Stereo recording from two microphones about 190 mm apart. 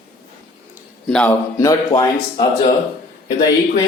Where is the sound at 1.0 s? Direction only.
5° left (ahead or behind).